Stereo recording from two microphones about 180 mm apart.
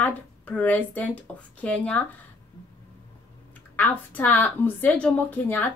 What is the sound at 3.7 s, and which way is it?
Speech, 10° left (ahead or behind).